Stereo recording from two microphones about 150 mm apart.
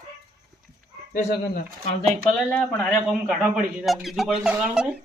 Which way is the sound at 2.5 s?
5° left (ahead or behind).